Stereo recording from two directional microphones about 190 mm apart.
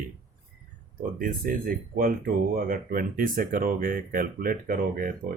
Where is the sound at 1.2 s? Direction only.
45° right (ahead or behind).